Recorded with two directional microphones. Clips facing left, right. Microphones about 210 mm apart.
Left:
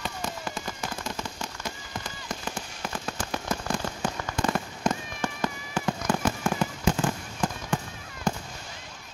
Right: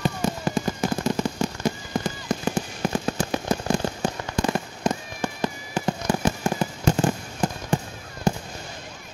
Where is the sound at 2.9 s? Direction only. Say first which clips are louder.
Right 7 dB; 20° right (ahead or behind).